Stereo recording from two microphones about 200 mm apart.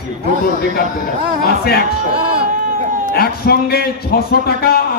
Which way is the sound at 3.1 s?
50° left (ahead or behind).